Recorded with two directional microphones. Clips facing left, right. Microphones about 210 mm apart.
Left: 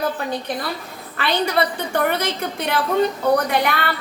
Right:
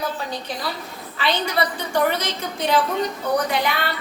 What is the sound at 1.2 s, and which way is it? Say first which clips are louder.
A woman's voice: left 3 dB; 60° left (ahead or behind).